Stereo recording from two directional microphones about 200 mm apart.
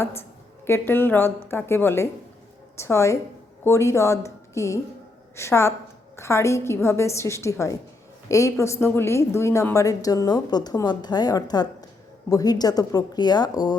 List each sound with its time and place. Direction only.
0.0 s a woman's voice: 10° left (ahead or behind)